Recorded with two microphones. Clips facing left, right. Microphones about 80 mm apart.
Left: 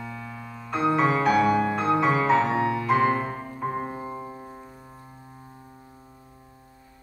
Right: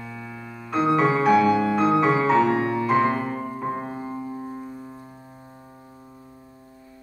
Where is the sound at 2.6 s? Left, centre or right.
Centre.